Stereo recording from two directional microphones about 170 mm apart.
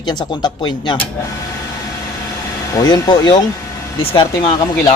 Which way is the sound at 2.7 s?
25° left (ahead or behind).